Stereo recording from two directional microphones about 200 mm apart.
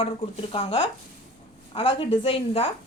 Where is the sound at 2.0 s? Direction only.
25° left (ahead or behind).